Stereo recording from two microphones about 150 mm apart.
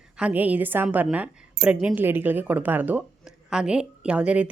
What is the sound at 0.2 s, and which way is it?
A woman's voice, 10° right (ahead or behind).